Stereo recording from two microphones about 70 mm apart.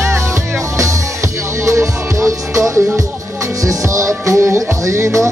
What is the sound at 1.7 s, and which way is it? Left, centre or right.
Music, right.